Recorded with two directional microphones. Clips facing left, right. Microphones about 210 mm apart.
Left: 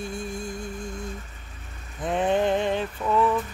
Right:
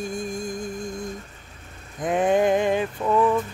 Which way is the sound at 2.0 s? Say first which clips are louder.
Right 3 dB; 10° right (ahead or behind).